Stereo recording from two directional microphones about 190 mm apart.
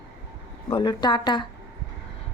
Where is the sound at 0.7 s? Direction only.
25° left (ahead or behind).